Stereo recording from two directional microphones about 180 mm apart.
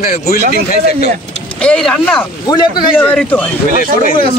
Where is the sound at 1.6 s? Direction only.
5° left (ahead or behind).